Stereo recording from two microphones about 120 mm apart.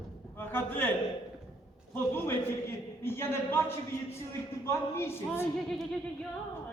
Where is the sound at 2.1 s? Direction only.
20° left (ahead or behind).